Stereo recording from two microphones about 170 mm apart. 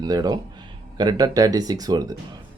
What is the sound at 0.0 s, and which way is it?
Speech, 20° right (ahead or behind).